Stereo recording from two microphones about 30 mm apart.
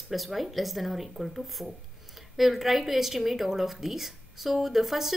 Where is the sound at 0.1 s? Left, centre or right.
Centre.